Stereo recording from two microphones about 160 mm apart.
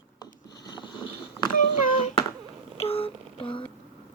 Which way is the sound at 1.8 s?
55° left (ahead or behind).